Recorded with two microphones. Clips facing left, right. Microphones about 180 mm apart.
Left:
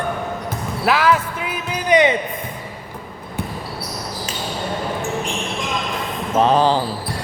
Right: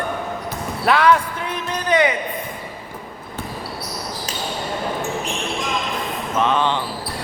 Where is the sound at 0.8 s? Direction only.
5° left (ahead or behind).